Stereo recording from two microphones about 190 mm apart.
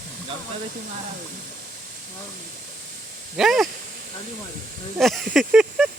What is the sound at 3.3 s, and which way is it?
Speech, centre (ahead or behind).